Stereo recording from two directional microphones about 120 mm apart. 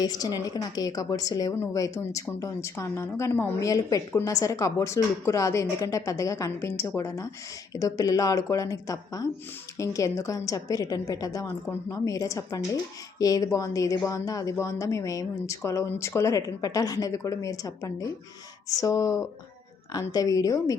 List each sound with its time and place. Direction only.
0.0 s a woman's voice: 35° left (ahead or behind)